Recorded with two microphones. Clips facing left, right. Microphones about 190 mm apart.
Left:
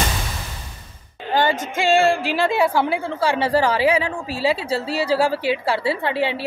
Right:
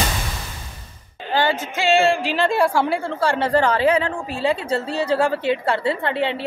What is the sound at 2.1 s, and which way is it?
A woman's voice, 10° left (ahead or behind).